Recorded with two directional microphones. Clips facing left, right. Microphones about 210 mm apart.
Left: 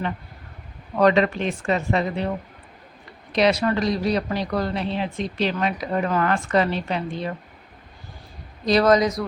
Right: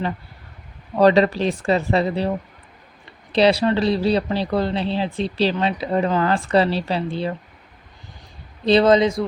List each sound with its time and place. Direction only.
0.9 s speech: 35° right (ahead or behind)
3.3 s speech: 30° right (ahead or behind)
8.6 s a man's voice: 25° right (ahead or behind)